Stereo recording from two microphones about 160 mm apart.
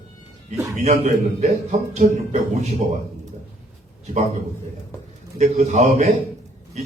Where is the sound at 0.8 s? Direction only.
45° right (ahead or behind).